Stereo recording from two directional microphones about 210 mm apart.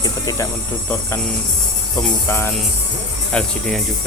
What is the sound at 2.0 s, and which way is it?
Speech, 10° left (ahead or behind).